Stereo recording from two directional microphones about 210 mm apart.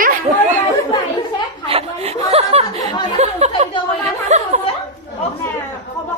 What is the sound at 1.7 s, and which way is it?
Chuckle, 30° right (ahead or behind).